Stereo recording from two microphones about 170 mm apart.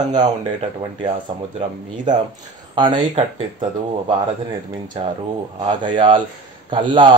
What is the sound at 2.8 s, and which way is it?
Speech, 30° right (ahead or behind).